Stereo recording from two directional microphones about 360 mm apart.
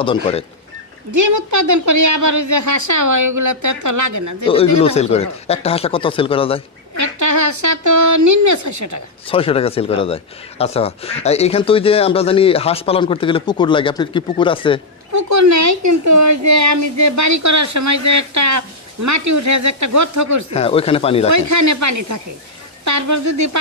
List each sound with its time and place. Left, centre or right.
0.0 s a man's voice: centre
1.1 s speech: right
4.8 s a man's voice: centre
7.0 s speech: right
9.3 s a man's voice: centre
15.1 s speech: right
20.5 s a man's voice: centre
21.3 s speech: right